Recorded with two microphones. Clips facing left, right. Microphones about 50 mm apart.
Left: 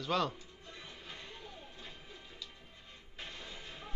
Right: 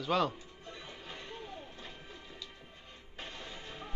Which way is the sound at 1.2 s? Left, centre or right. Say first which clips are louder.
Right 4 dB; right.